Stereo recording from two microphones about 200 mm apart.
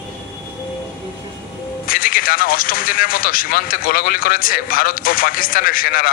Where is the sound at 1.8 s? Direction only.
45° left (ahead or behind).